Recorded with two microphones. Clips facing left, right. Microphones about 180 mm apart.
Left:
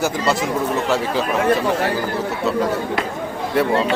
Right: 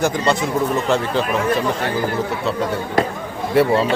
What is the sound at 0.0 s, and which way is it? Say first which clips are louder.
Speech: right 1 dB; 5° left (ahead or behind).